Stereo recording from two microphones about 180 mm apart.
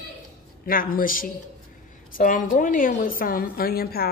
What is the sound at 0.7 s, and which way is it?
A woman's voice, 55° left (ahead or behind).